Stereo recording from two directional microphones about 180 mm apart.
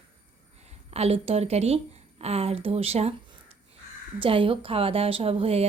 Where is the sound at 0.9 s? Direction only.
35° right (ahead or behind).